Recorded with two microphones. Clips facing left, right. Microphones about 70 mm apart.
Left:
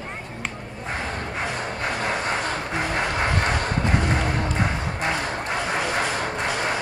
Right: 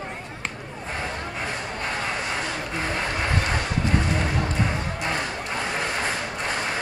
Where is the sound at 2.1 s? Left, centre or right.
Left.